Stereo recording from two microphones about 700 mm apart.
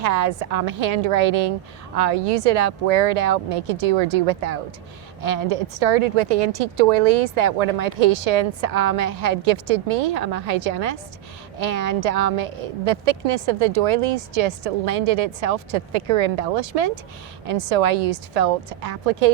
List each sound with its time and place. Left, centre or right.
0.0 s a woman's voice: right